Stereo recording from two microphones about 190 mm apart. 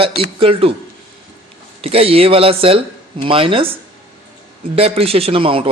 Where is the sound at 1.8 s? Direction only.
30° right (ahead or behind).